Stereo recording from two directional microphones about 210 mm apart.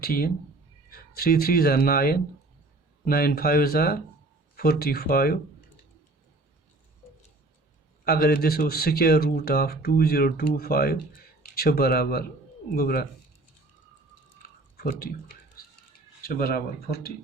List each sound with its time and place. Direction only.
0.0 s speech: 45° left (ahead or behind)
8.0 s speech: 45° left (ahead or behind)
14.9 s speech: 45° left (ahead or behind)